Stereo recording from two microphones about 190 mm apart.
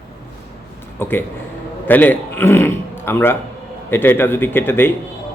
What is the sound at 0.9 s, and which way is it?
A man's voice, 10° left (ahead or behind).